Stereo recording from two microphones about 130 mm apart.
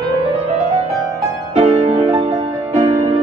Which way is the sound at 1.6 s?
55° right (ahead or behind).